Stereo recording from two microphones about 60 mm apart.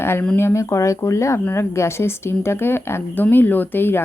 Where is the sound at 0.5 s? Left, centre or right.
Left.